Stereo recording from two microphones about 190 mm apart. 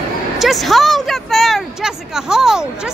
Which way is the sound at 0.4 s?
Centre (ahead or behind).